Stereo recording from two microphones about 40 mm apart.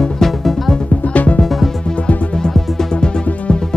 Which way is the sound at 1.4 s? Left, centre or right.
Centre.